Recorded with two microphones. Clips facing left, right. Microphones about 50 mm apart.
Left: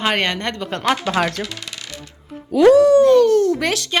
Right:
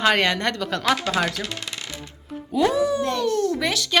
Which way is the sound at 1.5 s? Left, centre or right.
Right.